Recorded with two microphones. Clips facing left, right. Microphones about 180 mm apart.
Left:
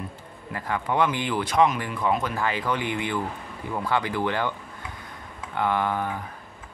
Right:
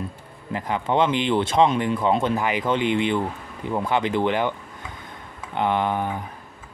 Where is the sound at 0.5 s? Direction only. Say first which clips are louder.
Right 4 dB; 20° right (ahead or behind).